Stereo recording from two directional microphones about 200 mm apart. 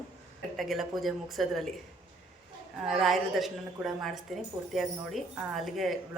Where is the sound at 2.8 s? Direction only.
Centre (ahead or behind).